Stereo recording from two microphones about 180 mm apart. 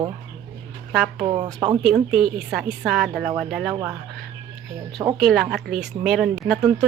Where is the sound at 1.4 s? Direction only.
20° right (ahead or behind).